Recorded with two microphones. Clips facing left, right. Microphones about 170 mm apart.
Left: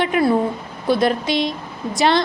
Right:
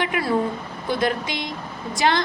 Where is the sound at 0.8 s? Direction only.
15° right (ahead or behind).